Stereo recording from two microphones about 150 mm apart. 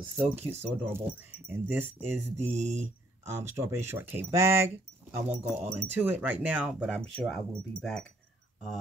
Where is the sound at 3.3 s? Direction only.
20° right (ahead or behind).